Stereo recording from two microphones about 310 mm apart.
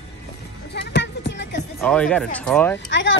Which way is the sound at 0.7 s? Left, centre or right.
Left.